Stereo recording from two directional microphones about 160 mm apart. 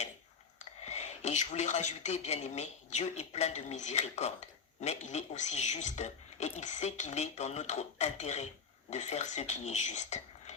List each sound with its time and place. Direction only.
0.9 s speech: 45° left (ahead or behind)